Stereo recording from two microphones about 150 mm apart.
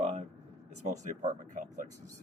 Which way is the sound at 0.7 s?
50° right (ahead or behind).